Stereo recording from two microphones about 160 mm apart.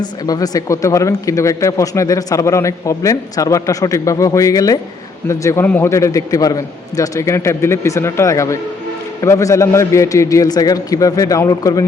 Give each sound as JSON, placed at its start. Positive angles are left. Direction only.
{"t": 0.0, "sound": "speech", "side_deg": 25}